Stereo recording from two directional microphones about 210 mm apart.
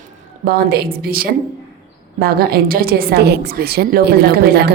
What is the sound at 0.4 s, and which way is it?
A woman's voice, 45° right (ahead or behind).